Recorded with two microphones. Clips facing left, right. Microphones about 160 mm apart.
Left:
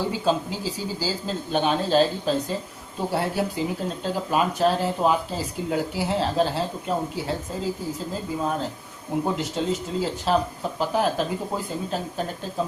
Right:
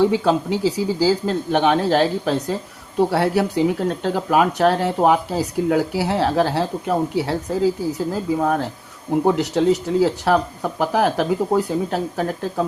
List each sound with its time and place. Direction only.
0.0 s speech: 75° right (ahead or behind)
9.2 s speech: 90° right
10.0 s speech: 70° right (ahead or behind)